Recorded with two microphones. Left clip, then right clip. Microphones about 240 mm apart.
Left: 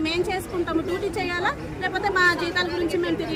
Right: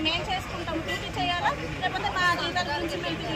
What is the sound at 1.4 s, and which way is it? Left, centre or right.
Speech, left.